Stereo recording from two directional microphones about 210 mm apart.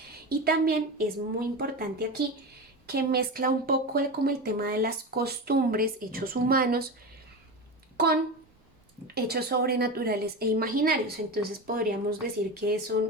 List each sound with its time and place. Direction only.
0.3 s speech: 45° right (ahead or behind)
7.9 s speech: 50° right (ahead or behind)